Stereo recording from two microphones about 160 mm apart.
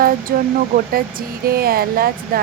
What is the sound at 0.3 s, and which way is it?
Speech, 75° right (ahead or behind).